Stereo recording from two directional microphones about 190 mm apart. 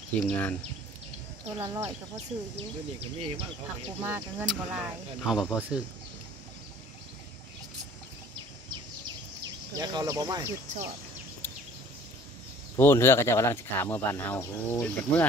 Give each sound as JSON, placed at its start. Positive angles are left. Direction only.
{"t": 0.2, "sound": "speech", "side_deg": 10}
{"t": 1.6, "sound": "speech", "side_deg": -15}
{"t": 1.9, "sound": "speech", "side_deg": -30}
{"t": 4.0, "sound": "speech", "side_deg": -10}
{"t": 9.8, "sound": "speech", "side_deg": -20}
{"t": 12.7, "sound": "speech", "side_deg": 10}